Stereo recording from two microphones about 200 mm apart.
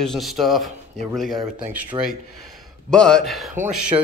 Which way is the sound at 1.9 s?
20° right (ahead or behind).